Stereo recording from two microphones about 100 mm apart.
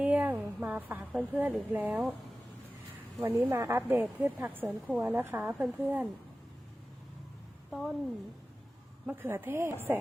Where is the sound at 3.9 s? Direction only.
20° right (ahead or behind).